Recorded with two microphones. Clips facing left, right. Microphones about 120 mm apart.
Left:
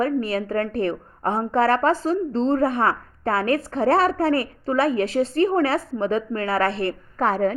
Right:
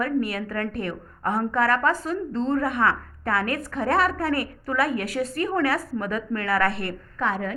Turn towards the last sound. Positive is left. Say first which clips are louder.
# left 6 dB
turn(degrees=35)  # may be behind; listen again after turning